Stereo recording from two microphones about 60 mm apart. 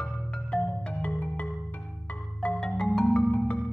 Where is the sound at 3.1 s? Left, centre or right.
Left.